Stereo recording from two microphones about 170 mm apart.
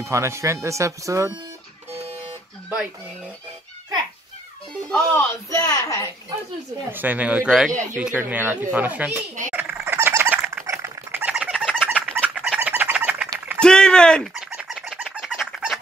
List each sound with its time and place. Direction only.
0.0 s speech: 15° right (ahead or behind)
4.9 s a woman's voice: 10° left (ahead or behind)
6.9 s speech: 10° right (ahead or behind)
7.7 s speech: 45° right (ahead or behind)
8.0 s speech: 10° right (ahead or behind)
9.5 s bird: 10° right (ahead or behind)
13.6 s a sound: 5° left (ahead or behind)
14.6 s bird: centre (ahead or behind)